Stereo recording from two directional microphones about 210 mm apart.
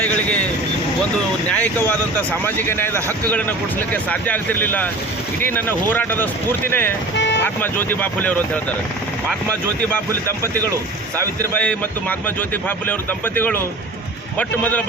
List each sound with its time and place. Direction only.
0.0 s vehicle: 5° left (ahead or behind)
1.5 s speech: 10° left (ahead or behind)
7.2 s vehicle: 55° left (ahead or behind)
7.4 s speech: 10° left (ahead or behind)
11.5 s speech: 5° left (ahead or behind)